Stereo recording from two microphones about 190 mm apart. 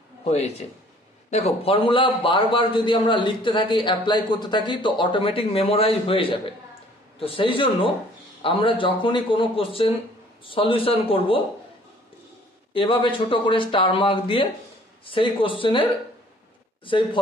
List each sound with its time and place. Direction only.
0.2 s a man's voice: 35° left (ahead or behind)
12.7 s a man's voice: 25° left (ahead or behind)